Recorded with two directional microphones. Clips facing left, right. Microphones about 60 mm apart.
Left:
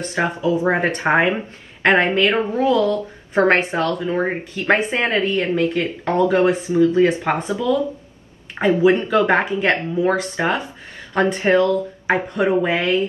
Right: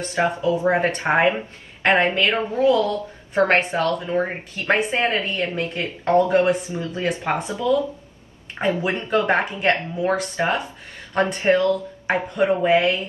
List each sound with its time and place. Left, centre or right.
0.0 s a woman's voice: left